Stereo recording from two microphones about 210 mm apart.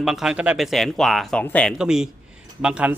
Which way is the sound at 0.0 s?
Centre (ahead or behind).